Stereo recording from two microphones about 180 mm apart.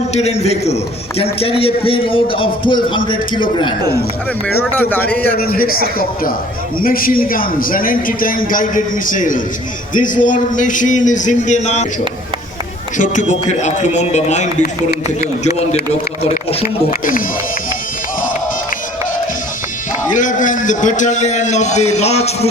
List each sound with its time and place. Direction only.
0.1 s a man's voice: 40° left (ahead or behind)
4.4 s a man's voice: 10° left (ahead or behind)
5.4 s a man's voice: 55° left (ahead or behind); by 11.9 s 40° left (ahead or behind)
13.0 s a man's voice: 45° left (ahead or behind)
20.1 s a man's voice: 45° left (ahead or behind)